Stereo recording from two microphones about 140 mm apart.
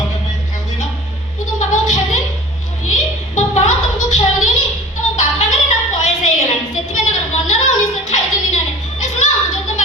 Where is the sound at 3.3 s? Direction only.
65° left (ahead or behind).